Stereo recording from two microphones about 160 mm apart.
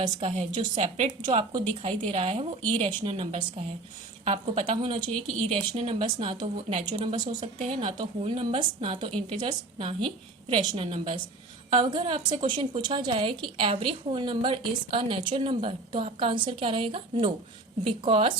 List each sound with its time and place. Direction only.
0.0 s a woman's voice: 35° right (ahead or behind)
4.3 s a woman's voice: 40° right (ahead or behind)